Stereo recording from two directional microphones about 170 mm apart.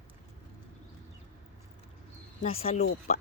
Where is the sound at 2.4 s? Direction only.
35° left (ahead or behind).